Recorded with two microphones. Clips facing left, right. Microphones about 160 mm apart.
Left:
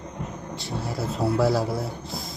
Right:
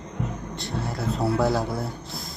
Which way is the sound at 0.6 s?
Centre (ahead or behind).